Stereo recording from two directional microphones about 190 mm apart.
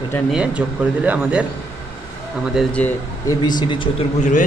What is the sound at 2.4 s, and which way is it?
Speech, centre (ahead or behind).